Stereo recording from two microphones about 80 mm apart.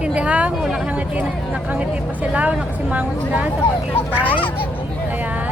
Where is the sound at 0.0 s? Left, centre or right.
Centre.